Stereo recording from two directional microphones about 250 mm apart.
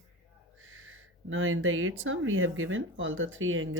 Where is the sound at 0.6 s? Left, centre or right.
Right.